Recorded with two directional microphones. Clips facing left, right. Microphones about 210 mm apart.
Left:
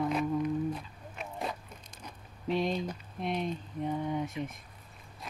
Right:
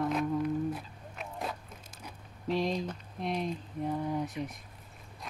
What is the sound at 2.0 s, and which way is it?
Speech, centre (ahead or behind).